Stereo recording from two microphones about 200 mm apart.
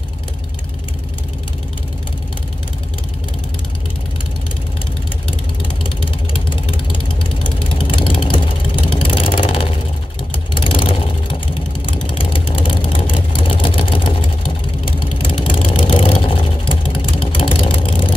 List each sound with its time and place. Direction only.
5.6 s vehicle: 25° left (ahead or behind)